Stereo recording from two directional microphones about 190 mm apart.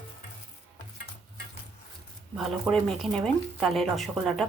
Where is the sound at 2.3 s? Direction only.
Centre (ahead or behind).